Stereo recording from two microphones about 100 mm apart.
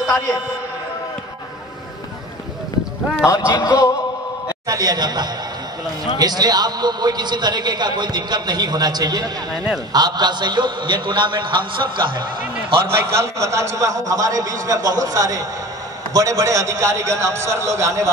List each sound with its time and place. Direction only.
3.3 s speech: 35° left (ahead or behind)
4.6 s a man's voice: 40° right (ahead or behind)
12.8 s a man's voice: 25° right (ahead or behind)